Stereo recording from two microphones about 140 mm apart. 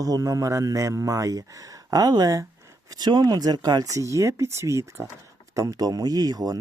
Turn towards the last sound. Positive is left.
turn(degrees=-25)  # may be behind; listen again after turning